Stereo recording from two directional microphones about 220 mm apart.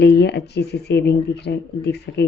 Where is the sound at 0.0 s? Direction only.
50° left (ahead or behind).